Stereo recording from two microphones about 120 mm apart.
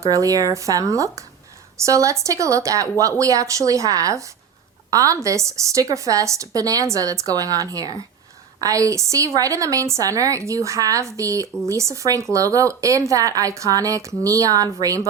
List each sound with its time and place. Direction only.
0.0 s a woman's voice: 30° right (ahead or behind)